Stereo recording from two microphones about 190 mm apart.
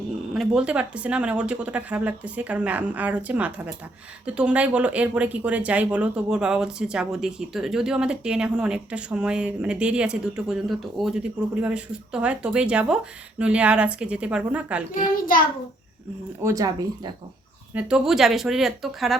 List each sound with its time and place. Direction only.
0.3 s speech: 5° right (ahead or behind)
14.9 s a child's voice: 45° left (ahead or behind)
16.4 s speech: 15° right (ahead or behind)
17.7 s speech: 5° right (ahead or behind)